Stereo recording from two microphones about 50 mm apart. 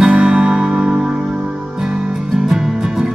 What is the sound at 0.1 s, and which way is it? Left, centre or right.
Music, right.